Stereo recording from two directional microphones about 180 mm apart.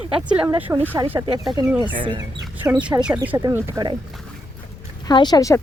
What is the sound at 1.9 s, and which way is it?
Speech, 25° right (ahead or behind).